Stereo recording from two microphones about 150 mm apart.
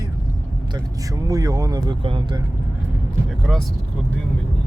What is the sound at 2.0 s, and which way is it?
Speech, 35° right (ahead or behind).